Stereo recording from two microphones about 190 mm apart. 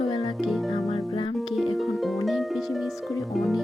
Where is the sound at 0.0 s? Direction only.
35° left (ahead or behind).